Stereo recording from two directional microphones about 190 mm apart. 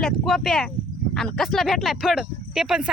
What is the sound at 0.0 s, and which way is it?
Speech, centre (ahead or behind).